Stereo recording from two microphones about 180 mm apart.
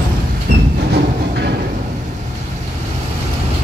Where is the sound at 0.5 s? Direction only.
65° right (ahead or behind).